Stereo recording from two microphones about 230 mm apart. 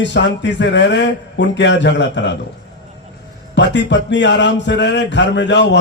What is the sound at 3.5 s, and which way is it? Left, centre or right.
A man's voice, left.